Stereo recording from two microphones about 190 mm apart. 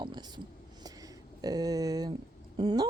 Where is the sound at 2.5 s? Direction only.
25° right (ahead or behind).